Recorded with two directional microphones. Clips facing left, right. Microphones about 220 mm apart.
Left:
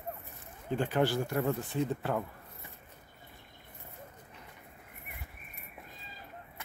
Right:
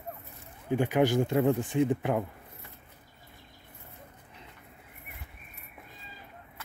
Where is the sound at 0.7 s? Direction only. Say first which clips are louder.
Right 4 dB; 15° right (ahead or behind).